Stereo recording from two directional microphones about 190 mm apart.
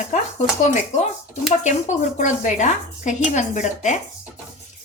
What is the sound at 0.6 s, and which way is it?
A woman's voice, 40° left (ahead or behind).